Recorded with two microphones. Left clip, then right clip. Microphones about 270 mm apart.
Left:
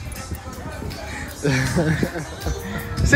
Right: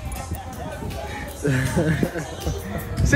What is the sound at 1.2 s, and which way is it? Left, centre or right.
Music, centre.